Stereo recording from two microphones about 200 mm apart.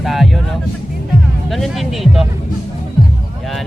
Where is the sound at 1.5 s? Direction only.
Centre (ahead or behind).